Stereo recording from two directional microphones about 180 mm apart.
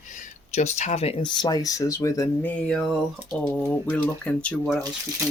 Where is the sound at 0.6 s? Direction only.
40° left (ahead or behind); by 4.7 s 5° left (ahead or behind).